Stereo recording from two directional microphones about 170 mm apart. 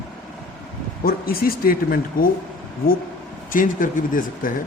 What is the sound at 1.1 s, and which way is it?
Speech, 60° left (ahead or behind).